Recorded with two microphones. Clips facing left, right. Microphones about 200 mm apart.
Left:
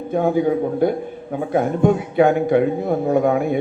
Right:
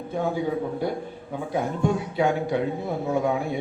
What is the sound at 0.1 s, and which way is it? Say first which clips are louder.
A man's voice: left 8 dB; 55° left (ahead or behind).